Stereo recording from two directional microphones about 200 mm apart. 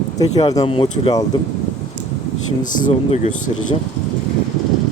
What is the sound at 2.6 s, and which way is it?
Speech, 40° left (ahead or behind).